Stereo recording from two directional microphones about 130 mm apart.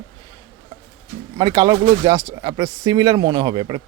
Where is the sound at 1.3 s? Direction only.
30° right (ahead or behind).